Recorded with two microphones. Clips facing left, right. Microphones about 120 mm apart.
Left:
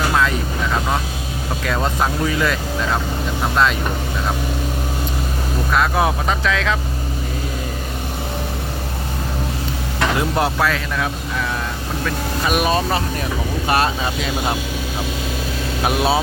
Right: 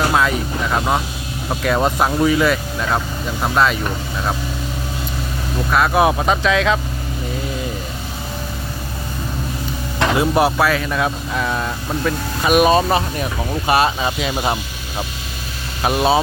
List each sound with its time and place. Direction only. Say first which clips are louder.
0.1 s vehicle: right 1 dB; 15° right (ahead or behind)
1.6 s speech: right 4 dB; 15° right (ahead or behind)
5.7 s speech: right 2 dB; 5° right (ahead or behind)
6.0 s speech: right 4 dB; 20° right (ahead or behind)
10.2 s speech: right 5 dB; 10° right (ahead or behind)
10.9 s speech: right 3 dB; 25° right (ahead or behind)
12.5 s speech: right 6 dB; 20° right (ahead or behind)
13.7 s speech: right 3 dB; 10° right (ahead or behind)
15.8 s speech: right 3 dB; centre (ahead or behind)